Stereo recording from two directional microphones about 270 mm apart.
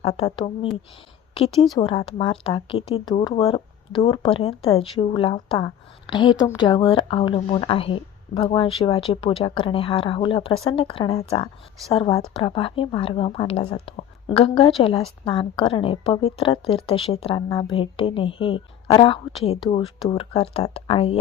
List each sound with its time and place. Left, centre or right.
0.0 s speech: left
1.8 s speech: centre